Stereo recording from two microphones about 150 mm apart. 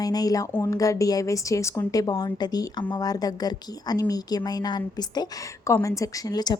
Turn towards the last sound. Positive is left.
turn(degrees=25)  # may be behind; listen again after turning